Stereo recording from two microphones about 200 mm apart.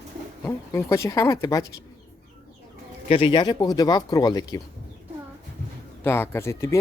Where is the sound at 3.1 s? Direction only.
25° left (ahead or behind).